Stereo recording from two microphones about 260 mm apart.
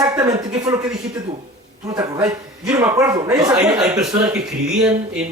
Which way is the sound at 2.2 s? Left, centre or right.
Centre.